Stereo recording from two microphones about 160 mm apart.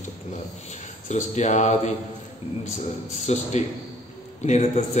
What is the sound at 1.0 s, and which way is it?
Speech, 50° left (ahead or behind).